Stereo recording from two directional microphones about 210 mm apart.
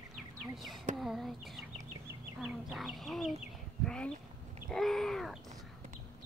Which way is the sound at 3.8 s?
5° left (ahead or behind).